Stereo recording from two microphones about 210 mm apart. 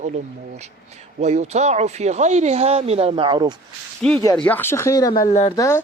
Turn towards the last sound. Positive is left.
turn(degrees=15)  # may be behind; listen again after turning